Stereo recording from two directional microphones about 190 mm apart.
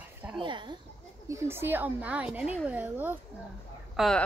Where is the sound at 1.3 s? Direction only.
10° right (ahead or behind).